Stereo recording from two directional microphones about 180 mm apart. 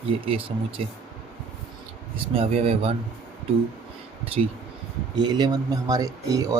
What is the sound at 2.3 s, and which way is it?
Speech, 35° right (ahead or behind).